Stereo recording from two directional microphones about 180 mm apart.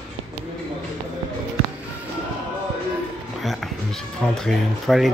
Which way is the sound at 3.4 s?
Centre (ahead or behind).